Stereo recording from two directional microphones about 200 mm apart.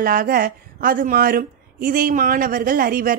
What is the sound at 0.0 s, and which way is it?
Speech, 45° right (ahead or behind).